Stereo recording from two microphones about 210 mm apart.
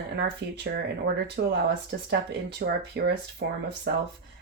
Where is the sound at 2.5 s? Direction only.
50° right (ahead or behind).